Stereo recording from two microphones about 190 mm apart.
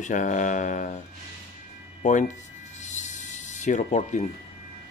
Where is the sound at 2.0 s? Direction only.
40° left (ahead or behind).